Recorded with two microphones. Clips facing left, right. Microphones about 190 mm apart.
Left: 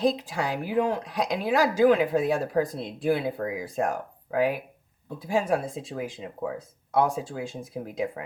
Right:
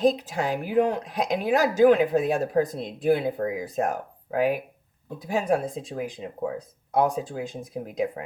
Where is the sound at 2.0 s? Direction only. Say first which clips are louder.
Right 2 dB; 20° right (ahead or behind).